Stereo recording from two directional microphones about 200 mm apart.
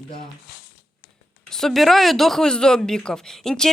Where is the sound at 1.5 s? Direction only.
Centre (ahead or behind).